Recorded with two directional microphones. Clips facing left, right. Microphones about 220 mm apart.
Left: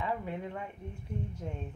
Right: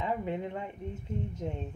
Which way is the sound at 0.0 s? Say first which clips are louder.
Right 3 dB; 20° right (ahead or behind).